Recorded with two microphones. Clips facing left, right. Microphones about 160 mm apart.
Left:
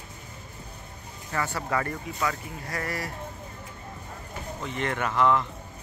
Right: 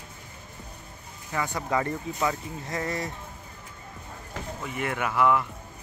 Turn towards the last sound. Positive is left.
turn(degrees=-10)  # may be behind; listen again after turning